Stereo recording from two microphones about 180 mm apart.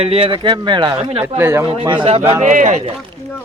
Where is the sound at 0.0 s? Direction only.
35° right (ahead or behind).